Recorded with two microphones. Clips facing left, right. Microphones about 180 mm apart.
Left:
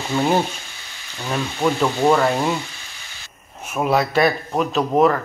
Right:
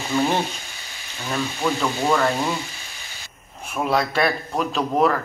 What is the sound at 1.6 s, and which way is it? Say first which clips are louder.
Speech: left 4 dB; 15° left (ahead or behind).